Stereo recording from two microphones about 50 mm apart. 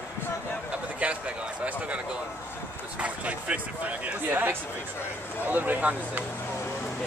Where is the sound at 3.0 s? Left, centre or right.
Right.